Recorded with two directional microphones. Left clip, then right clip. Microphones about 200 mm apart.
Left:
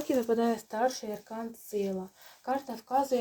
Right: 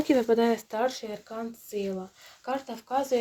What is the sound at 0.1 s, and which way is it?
Speech, 30° right (ahead or behind).